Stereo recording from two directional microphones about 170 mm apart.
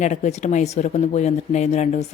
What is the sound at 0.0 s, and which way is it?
Speech, 45° left (ahead or behind).